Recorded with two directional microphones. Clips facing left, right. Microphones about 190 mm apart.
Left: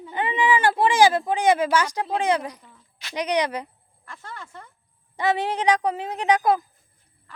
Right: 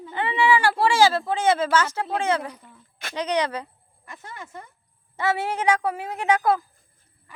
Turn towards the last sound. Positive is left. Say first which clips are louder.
# left 1 dB
turn(degrees=15)  # may be behind; listen again after turning